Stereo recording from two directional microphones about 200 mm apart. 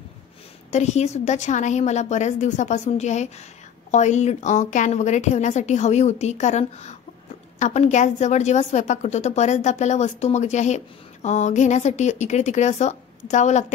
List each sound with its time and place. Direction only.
0.7 s a woman's voice: 35° left (ahead or behind)